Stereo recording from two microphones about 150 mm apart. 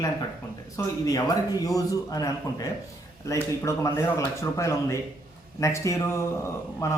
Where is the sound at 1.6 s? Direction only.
25° left (ahead or behind).